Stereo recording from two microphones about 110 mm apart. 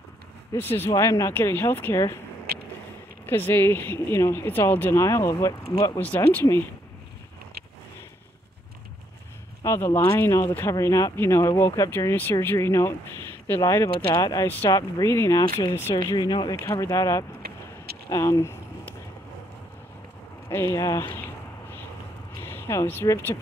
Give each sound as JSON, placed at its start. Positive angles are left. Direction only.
{"t": 0.6, "sound": "speech", "side_deg": 20}
{"t": 3.3, "sound": "speech", "side_deg": 20}
{"t": 5.9, "sound": "speech", "side_deg": 15}
{"t": 9.7, "sound": "speech", "side_deg": 25}
{"t": 16.2, "sound": "speech", "side_deg": 40}
{"t": 18.1, "sound": "a sound", "side_deg": 30}
{"t": 20.4, "sound": "speech", "side_deg": 25}
{"t": 22.4, "sound": "speech", "side_deg": 20}